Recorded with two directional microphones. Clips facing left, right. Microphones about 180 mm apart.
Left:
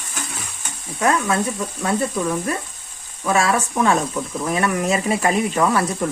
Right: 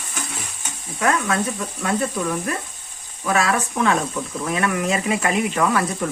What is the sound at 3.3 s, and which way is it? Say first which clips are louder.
Frying: left 2 dB; 30° left (ahead or behind).